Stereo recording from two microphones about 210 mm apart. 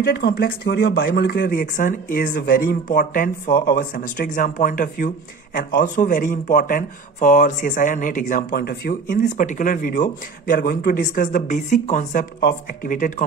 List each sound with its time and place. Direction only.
0.0 s speech: 50° left (ahead or behind)